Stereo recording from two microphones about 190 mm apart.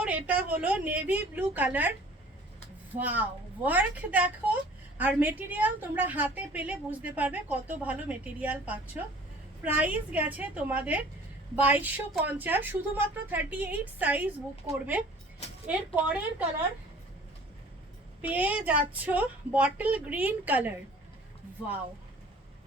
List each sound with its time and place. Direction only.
0.0 s a woman's voice: 5° right (ahead or behind)
3.0 s a woman's voice: 10° right (ahead or behind)
15.6 s a woman's voice: 10° right (ahead or behind)
18.2 s a woman's voice: 10° right (ahead or behind)